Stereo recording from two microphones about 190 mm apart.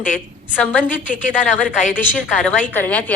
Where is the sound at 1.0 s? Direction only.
40° left (ahead or behind).